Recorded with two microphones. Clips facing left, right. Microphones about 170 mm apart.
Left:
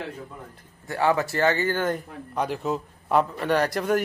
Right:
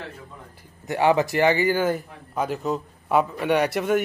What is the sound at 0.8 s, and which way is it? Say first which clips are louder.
Speech: right 3 dB; 15° right (ahead or behind).